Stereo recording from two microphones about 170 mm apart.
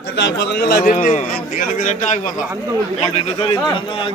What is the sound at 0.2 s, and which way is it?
Speech, 90° left.